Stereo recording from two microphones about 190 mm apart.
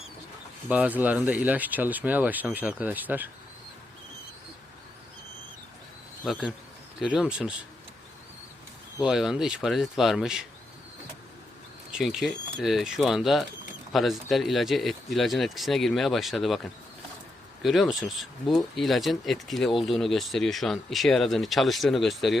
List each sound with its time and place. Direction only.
0.7 s speech: 10° right (ahead or behind)
6.2 s speech: 5° left (ahead or behind)
7.0 s speech: 5° right (ahead or behind)
9.0 s speech: 5° right (ahead or behind)
11.9 s speech: centre (ahead or behind)